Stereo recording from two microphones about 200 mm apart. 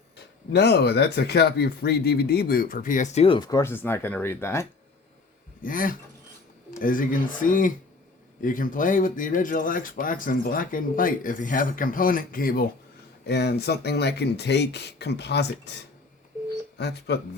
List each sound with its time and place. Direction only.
0.5 s speech: 55° left (ahead or behind); by 4.6 s 10° left (ahead or behind)
5.6 s speech: 45° left (ahead or behind)
16.7 s speech: 60° left (ahead or behind)